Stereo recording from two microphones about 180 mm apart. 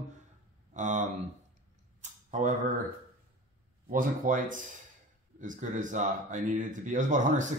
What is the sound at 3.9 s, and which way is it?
Speech, 50° right (ahead or behind).